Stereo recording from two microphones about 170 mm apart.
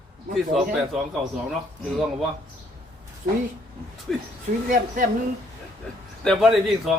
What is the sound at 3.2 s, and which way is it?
Speech, 45° right (ahead or behind).